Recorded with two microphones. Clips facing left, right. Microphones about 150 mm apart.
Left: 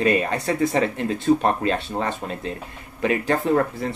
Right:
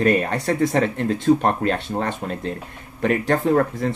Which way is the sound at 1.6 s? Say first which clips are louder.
Right 1 dB; 55° right (ahead or behind).